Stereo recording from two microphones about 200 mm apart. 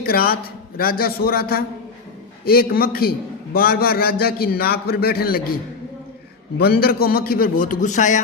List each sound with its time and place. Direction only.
0.0 s a man's voice: 50° left (ahead or behind)
6.6 s a man's voice: 50° left (ahead or behind)